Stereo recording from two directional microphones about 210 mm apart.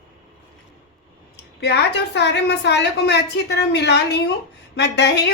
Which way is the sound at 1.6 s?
55° left (ahead or behind).